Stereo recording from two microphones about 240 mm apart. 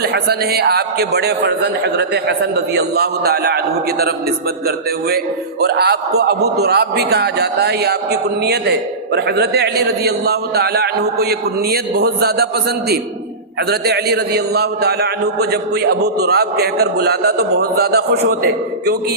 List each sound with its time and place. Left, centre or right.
0.0 s a man's voice: right
13.7 s a man's voice: right